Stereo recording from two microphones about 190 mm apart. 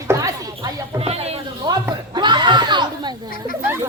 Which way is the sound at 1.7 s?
20° right (ahead or behind).